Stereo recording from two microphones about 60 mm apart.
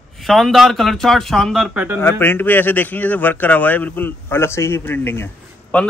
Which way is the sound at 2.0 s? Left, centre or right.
Left.